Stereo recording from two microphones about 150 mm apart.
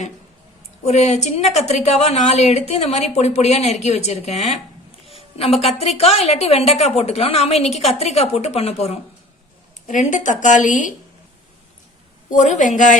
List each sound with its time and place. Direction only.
0.9 s a woman's voice: 50° left (ahead or behind)
5.0 s a sound: 40° left (ahead or behind)
5.8 s a woman's voice: 40° left (ahead or behind)
9.8 s speech: 55° left (ahead or behind)
12.3 s speech: 55° left (ahead or behind)